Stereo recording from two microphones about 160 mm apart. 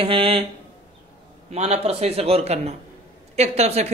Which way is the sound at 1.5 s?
40° right (ahead or behind).